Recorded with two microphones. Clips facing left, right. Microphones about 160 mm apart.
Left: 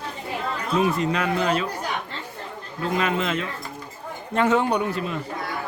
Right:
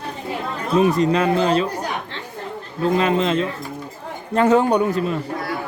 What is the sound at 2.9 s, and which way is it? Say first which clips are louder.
A man's voice: right 5 dB; 30° right (ahead or behind).